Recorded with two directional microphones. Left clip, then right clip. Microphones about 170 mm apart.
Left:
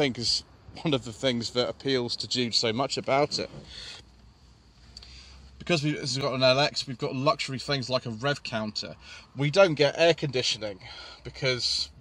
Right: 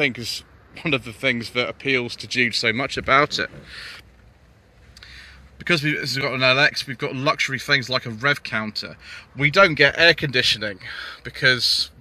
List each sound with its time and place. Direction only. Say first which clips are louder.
0.0 s speech: right 3 dB; 20° left (ahead or behind); by 3.5 s centre (ahead or behind)
3.6 s speech: right 6 dB; 15° left (ahead or behind)
5.0 s speech: right 7 dB; 10° left (ahead or behind)